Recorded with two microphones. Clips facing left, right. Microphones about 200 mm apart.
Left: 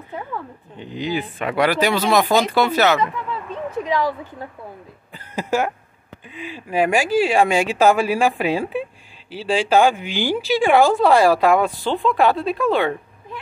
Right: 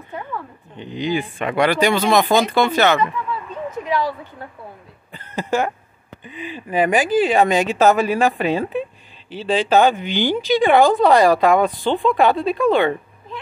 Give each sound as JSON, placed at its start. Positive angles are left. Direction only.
{"t": 0.7, "sound": "speech", "side_deg": 5}
{"t": 3.8, "sound": "a woman's voice", "side_deg": 20}
{"t": 5.1, "sound": "a sound", "side_deg": 10}
{"t": 6.2, "sound": "speech", "side_deg": 0}